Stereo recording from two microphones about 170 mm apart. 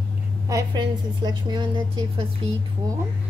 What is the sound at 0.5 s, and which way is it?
A woman's voice, 20° right (ahead or behind).